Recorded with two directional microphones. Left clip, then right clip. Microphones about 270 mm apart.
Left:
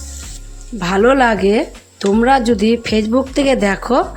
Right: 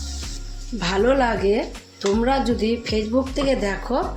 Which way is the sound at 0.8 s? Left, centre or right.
Left.